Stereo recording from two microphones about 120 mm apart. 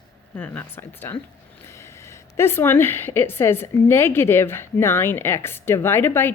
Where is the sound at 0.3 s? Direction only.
15° left (ahead or behind).